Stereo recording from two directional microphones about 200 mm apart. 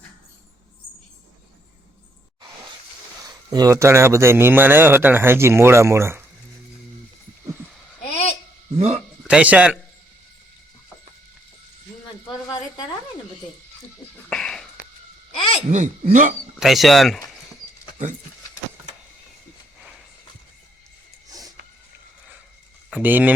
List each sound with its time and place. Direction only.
3.5 s speech: 15° right (ahead or behind)
8.1 s babbling: 30° left (ahead or behind)
8.7 s speech: 30° right (ahead or behind)
9.2 s speech: 5° right (ahead or behind)
14.3 s a sound: 5° left (ahead or behind)
15.4 s a sound: 30° left (ahead or behind)
15.7 s speech: 40° right (ahead or behind)
16.6 s speech: centre (ahead or behind)
21.2 s a sound: 20° right (ahead or behind)
23.0 s speech: 10° right (ahead or behind)